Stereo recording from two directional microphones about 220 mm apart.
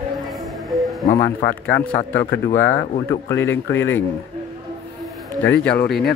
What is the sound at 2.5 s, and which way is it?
Speech, 10° left (ahead or behind).